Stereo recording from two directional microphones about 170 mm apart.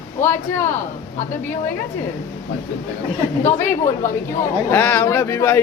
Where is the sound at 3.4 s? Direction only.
15° left (ahead or behind).